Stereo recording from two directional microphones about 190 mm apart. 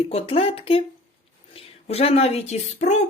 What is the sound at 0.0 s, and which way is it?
Speech, 30° left (ahead or behind).